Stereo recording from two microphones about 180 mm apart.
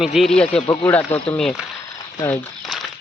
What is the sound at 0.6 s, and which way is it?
Speech, 25° left (ahead or behind).